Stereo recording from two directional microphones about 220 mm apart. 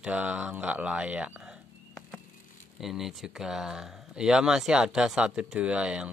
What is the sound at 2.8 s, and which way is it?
Speech, centre (ahead or behind).